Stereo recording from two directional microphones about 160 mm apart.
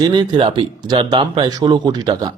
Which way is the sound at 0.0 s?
25° right (ahead or behind).